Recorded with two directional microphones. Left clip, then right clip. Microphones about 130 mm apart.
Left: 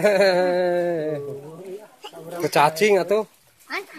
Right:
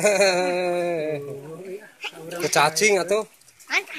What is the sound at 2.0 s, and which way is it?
Speech, 50° left (ahead or behind).